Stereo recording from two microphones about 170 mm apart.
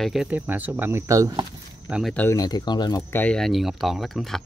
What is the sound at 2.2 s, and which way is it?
Speech, 15° left (ahead or behind).